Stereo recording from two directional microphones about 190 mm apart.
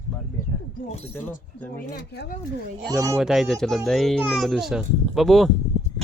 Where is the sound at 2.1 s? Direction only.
60° left (ahead or behind).